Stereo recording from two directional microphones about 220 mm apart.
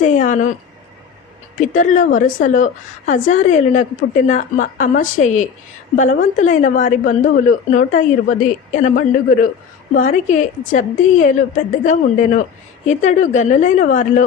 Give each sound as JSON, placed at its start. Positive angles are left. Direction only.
{"t": 0.0, "sound": "a woman's voice", "side_deg": 35}
{"t": 1.5, "sound": "a woman's voice", "side_deg": 35}